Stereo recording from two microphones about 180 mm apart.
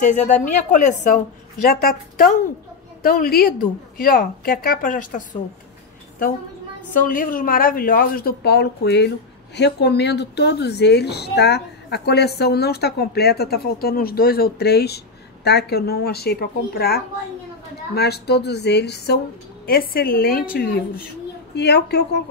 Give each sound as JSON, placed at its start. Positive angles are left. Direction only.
{"t": 0.0, "sound": "a woman's voice", "side_deg": 45}
{"t": 6.9, "sound": "a woman's voice", "side_deg": 50}
{"t": 19.6, "sound": "a woman's voice", "side_deg": 55}